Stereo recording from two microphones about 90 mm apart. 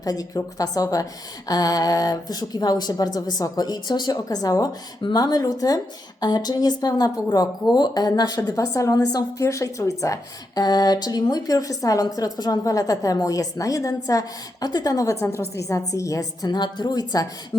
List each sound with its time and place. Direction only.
0.0 s a woman's voice: 45° left (ahead or behind)
16.5 s speech: 55° left (ahead or behind)
17.5 s beatboxing: 65° left (ahead or behind)